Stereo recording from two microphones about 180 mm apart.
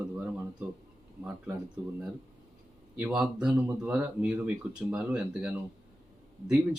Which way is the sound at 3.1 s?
5° right (ahead or behind).